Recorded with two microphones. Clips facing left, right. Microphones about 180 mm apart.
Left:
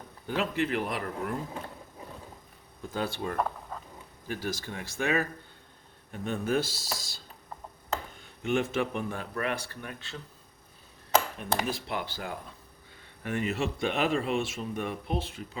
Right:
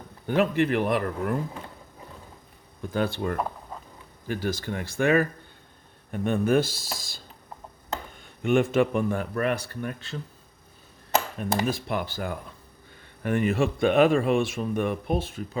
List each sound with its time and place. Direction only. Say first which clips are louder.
0.3 s speech: right 7 dB; 55° right (ahead or behind)
2.9 s speech: right 5 dB; 60° right (ahead or behind)
8.4 s speech: right 7 dB; 55° right (ahead or behind)
11.3 s speech: right 5 dB; 45° right (ahead or behind)